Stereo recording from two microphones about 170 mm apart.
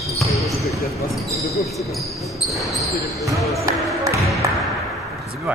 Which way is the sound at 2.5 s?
Centre (ahead or behind).